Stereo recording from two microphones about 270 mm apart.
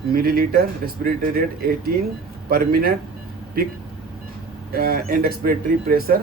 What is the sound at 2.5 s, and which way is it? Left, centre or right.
Speech, right.